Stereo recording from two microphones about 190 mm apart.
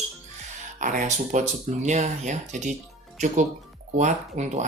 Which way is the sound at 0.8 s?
40° right (ahead or behind).